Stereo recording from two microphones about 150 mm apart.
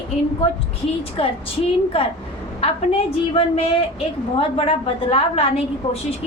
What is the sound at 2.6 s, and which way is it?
A woman's voice, 40° left (ahead or behind).